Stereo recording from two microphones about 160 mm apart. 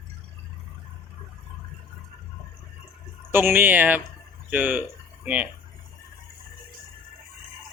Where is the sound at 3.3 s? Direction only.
15° right (ahead or behind).